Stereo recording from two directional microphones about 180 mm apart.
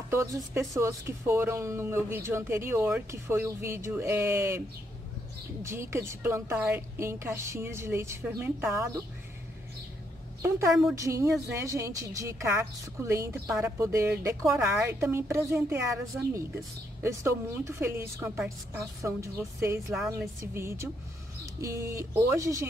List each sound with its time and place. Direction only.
0.1 s a woman's voice: 15° right (ahead or behind)
11.0 s a woman's voice: 15° right (ahead or behind)